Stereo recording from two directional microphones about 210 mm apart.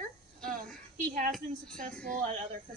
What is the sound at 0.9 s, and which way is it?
Speech, 35° right (ahead or behind).